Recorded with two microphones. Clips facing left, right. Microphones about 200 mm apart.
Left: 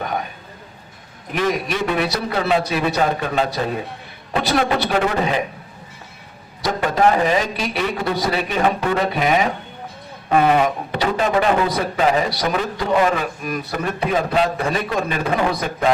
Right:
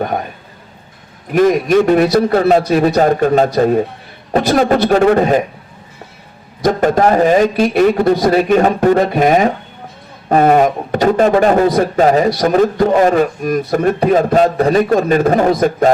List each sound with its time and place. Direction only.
0.0 s a man's voice: 45° right (ahead or behind)
1.3 s a man's voice: 45° right (ahead or behind)
6.6 s a man's voice: 45° right (ahead or behind)